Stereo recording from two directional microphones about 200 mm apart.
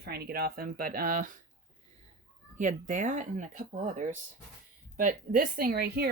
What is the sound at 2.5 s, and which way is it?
Speech, 40° right (ahead or behind).